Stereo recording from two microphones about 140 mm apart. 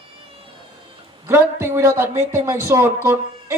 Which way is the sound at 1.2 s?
20° right (ahead or behind).